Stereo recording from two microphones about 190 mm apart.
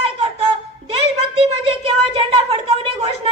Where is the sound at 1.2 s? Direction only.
30° right (ahead or behind).